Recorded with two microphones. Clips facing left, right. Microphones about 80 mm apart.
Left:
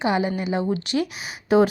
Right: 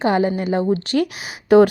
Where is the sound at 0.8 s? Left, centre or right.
Right.